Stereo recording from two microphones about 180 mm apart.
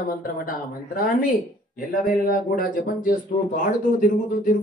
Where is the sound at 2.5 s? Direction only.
50° left (ahead or behind).